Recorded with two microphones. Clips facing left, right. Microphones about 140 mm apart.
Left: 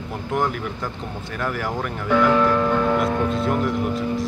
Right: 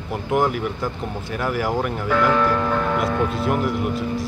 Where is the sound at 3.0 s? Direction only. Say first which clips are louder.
Even; 5° right (ahead or behind).